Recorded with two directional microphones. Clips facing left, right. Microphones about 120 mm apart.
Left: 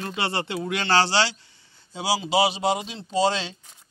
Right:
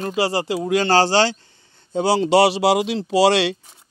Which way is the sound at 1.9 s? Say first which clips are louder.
Right 8 dB; 55° right (ahead or behind).